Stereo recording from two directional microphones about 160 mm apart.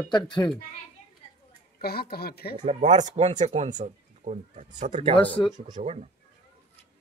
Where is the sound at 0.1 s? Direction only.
30° left (ahead or behind).